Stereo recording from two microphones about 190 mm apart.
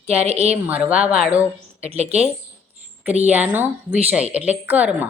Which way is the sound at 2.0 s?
35° right (ahead or behind).